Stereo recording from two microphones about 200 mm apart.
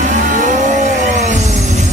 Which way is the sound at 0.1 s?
40° right (ahead or behind).